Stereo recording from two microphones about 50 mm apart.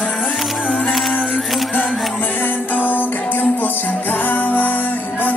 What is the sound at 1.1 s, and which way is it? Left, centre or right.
Music, left.